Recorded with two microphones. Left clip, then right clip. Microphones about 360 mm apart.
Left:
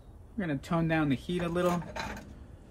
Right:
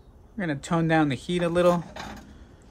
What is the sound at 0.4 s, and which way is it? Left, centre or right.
Speech, right.